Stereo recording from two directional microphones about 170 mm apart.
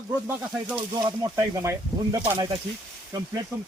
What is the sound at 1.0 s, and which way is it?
Speech, 20° right (ahead or behind).